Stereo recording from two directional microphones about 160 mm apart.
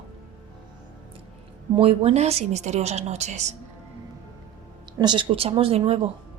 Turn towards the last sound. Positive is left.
turn(degrees=-40)  # may be behind; listen again after turning